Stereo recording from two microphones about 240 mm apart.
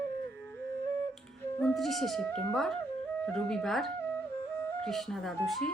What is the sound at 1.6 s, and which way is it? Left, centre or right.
Speech, centre.